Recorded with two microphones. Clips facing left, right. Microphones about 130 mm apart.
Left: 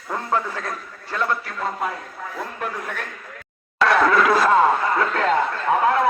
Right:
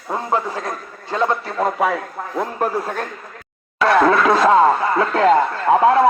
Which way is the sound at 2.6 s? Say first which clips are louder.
Right 8 dB; 35° right (ahead or behind).